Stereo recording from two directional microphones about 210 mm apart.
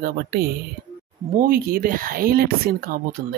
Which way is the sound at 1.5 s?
45° right (ahead or behind).